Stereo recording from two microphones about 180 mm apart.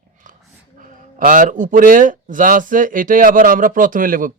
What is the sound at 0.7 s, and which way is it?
Speech, 50° right (ahead or behind).